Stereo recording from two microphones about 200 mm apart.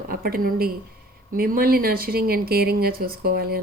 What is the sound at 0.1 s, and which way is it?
Speech, 45° right (ahead or behind).